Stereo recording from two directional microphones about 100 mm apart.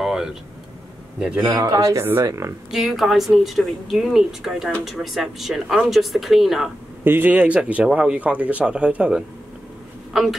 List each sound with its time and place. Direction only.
0.0 s vehicle: 5° right (ahead or behind)
1.4 s speech: 40° right (ahead or behind)
2.7 s speech: centre (ahead or behind)
7.1 s speech: 15° right (ahead or behind)